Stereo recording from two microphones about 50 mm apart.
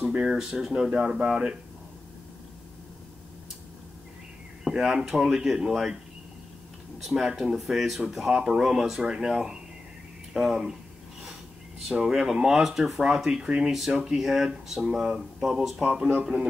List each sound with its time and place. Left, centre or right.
0.0 s speech: centre
0.8 s speech: centre
4.6 s speech: centre
7.0 s speech: centre
8.3 s speech: centre
11.9 s speech: centre
15.8 s speech: centre